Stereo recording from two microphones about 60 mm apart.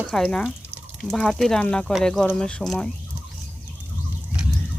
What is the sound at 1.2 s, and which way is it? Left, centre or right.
Speech, centre.